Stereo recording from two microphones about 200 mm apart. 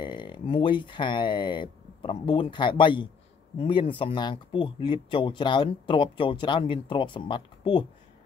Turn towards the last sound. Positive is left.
turn(degrees=25)  # may be behind; listen again after turning